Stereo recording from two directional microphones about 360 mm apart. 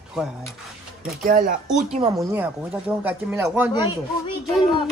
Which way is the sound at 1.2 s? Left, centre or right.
Right.